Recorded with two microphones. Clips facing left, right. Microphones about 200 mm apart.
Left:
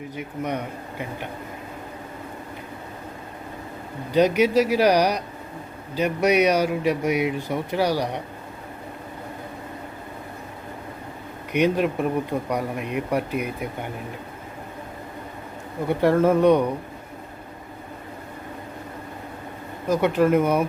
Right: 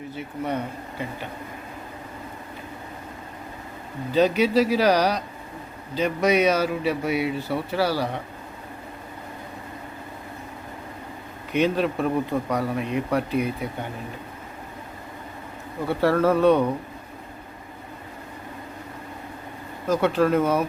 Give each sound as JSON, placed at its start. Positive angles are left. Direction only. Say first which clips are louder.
{"t": 0.1, "sound": "speech", "louder": "even", "side_deg": 15}
{"t": 4.1, "sound": "speech", "louder": "left 1 dB", "side_deg": 15}
{"t": 11.5, "sound": "speech", "louder": "left 1 dB", "side_deg": 15}
{"t": 15.9, "sound": "speech", "louder": "left 2 dB", "side_deg": 15}
{"t": 19.9, "sound": "speech", "louder": "left 1 dB", "side_deg": 15}